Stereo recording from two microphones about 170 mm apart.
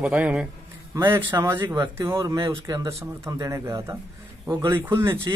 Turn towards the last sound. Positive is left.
turn(degrees=-15)  # may be behind; listen again after turning